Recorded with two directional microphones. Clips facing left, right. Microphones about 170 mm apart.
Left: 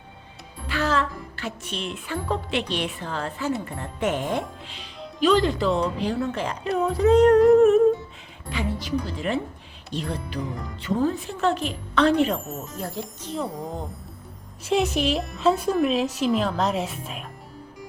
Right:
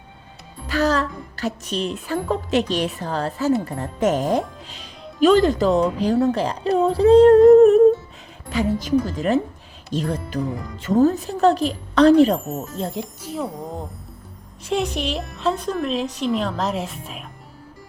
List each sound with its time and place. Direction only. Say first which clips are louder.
0.7 s a woman's voice: right 4 dB; 40° right (ahead or behind)
12.7 s speech: right 3 dB; 20° right (ahead or behind)
13.2 s a woman's voice: even; centre (ahead or behind)